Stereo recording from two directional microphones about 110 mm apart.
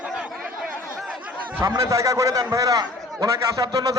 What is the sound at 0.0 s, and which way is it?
Chatter, 10° right (ahead or behind).